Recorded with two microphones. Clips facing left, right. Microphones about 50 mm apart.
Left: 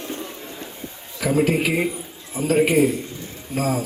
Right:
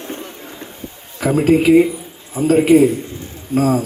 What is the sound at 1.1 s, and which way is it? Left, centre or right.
Speech, right.